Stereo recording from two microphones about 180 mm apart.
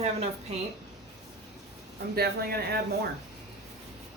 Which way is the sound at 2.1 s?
60° right (ahead or behind).